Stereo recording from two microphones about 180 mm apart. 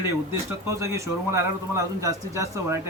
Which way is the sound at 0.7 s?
15° right (ahead or behind).